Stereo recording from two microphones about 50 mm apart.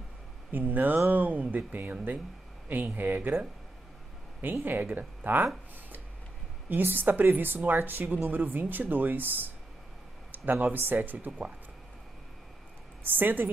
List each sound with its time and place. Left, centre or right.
0.5 s speech: right
4.6 s speech: right
6.7 s speech: right
13.0 s speech: right